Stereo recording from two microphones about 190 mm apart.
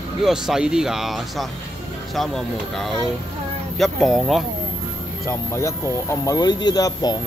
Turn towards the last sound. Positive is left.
turn(degrees=20)  # may be behind; listen again after turning